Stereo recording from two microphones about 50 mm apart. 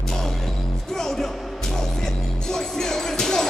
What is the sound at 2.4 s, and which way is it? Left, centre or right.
Music, centre.